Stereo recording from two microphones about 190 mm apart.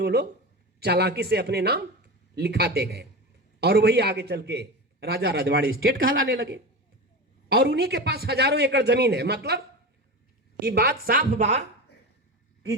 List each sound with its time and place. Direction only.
0.0 s a man's voice: 55° right (ahead or behind)
7.4 s a man's voice: 60° right (ahead or behind)
10.6 s a woman's voice: 55° right (ahead or behind); by 11.6 s 35° right (ahead or behind)